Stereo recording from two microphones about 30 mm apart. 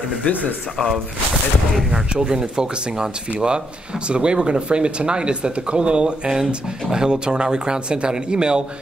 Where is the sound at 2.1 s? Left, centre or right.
Right.